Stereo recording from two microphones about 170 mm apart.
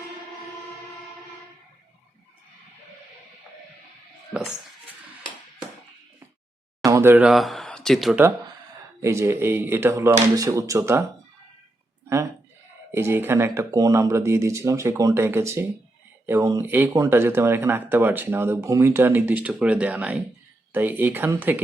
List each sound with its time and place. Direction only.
6.8 s speech: 15° right (ahead or behind)
9.0 s speech: 15° right (ahead or behind)
12.0 s a sound: 15° right (ahead or behind)
12.9 s speech: 15° right (ahead or behind)